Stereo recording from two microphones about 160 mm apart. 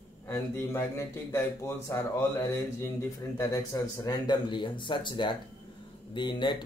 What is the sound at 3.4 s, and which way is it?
A man's voice, 20° left (ahead or behind).